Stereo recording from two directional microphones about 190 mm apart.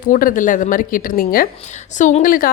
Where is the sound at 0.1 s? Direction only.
45° left (ahead or behind).